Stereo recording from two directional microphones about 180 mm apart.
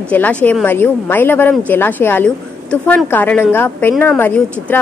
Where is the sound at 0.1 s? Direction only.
5° left (ahead or behind).